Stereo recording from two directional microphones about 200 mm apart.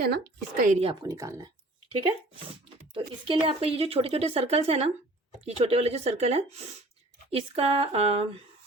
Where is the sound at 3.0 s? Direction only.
25° right (ahead or behind).